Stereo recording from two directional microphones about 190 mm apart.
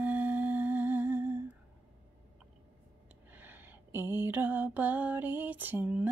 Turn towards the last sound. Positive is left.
turn(degrees=-10)  # may be behind; listen again after turning